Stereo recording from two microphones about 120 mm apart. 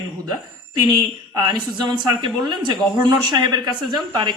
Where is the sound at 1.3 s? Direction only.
35° right (ahead or behind).